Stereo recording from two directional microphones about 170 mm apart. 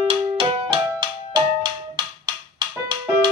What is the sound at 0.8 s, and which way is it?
Music, 20° right (ahead or behind).